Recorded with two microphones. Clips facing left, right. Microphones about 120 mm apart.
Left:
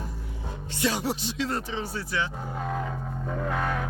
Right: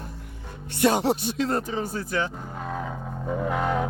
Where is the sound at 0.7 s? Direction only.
55° right (ahead or behind).